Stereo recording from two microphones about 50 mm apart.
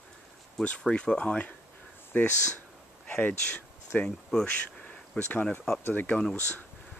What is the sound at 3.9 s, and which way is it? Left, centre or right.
Speech, left.